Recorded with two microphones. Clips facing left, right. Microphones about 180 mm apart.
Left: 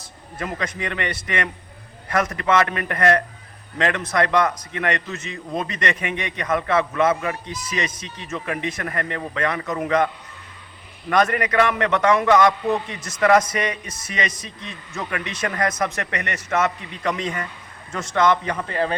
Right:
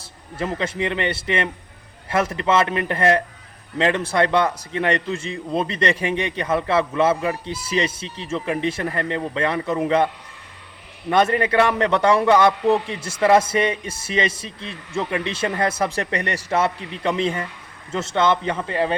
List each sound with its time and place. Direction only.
0.3 s a man's voice: 25° right (ahead or behind)
11.1 s a man's voice: 25° right (ahead or behind)